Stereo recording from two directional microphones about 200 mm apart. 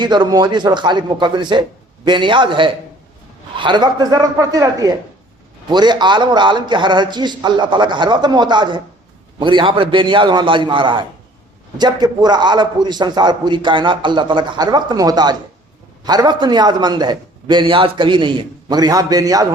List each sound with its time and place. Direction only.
0.0 s a man's voice: 20° right (ahead or behind)